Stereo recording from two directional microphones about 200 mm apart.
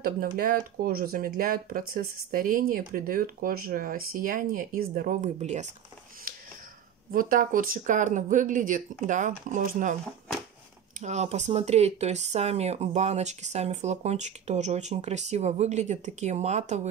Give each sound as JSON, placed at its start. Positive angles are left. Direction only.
{"t": 0.4, "sound": "speech", "side_deg": -45}
{"t": 7.1, "sound": "speech", "side_deg": -45}
{"t": 11.0, "sound": "speech", "side_deg": -35}